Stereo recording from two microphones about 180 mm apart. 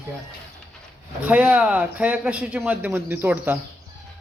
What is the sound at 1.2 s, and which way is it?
Speech, 10° right (ahead or behind).